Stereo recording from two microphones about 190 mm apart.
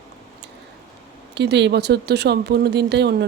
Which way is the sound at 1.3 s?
65° right (ahead or behind).